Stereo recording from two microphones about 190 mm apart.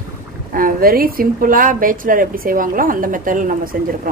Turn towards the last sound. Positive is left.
turn(degrees=-45)  # may be behind; listen again after turning